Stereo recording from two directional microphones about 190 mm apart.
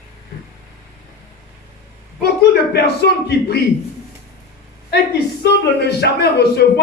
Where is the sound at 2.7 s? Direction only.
60° left (ahead or behind).